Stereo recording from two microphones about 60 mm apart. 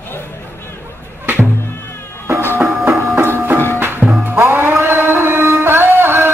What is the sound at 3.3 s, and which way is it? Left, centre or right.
Music, right.